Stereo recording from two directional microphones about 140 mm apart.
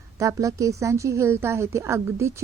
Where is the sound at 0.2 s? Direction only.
25° right (ahead or behind).